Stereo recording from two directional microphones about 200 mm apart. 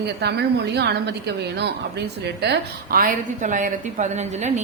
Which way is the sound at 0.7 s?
55° right (ahead or behind).